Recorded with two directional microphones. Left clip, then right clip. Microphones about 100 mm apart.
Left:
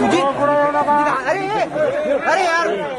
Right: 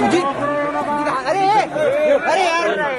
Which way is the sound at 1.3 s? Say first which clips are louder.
Right 4 dB; 50° right (ahead or behind).